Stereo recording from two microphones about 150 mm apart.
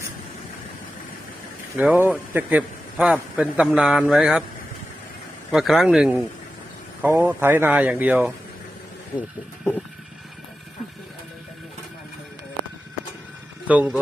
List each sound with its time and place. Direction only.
1.7 s a man's voice: 10° right (ahead or behind)
5.5 s a man's voice: centre (ahead or behind)
9.1 s speech: 30° left (ahead or behind)
13.7 s a man's voice: 10° right (ahead or behind)